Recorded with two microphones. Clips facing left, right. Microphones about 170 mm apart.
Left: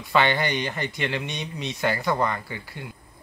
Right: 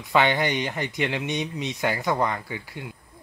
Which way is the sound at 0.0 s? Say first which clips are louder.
Right 1 dB; 15° right (ahead or behind).